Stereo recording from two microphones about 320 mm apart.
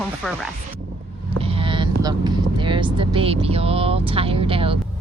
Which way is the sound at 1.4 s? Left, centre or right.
Centre.